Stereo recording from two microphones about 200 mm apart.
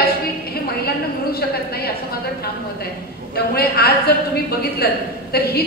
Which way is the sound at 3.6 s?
50° left (ahead or behind).